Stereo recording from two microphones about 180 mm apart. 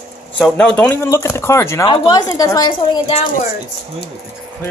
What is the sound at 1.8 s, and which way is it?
Speech, 25° left (ahead or behind).